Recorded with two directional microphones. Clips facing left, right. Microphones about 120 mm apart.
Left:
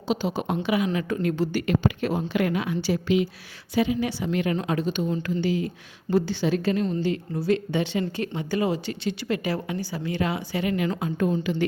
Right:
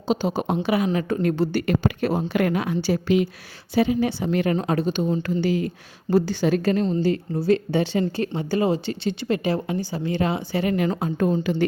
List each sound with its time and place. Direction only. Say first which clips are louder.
0.1 s a woman's voice: right 3 dB; 40° right (ahead or behind)
3.8 s a woman's voice: right 3 dB; 35° right (ahead or behind)
6.8 s a woman's voice: right 4 dB; 35° right (ahead or behind)